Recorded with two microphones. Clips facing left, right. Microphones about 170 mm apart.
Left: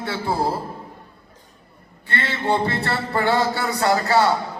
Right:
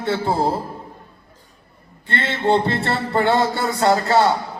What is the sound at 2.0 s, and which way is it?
A man's voice, 25° right (ahead or behind).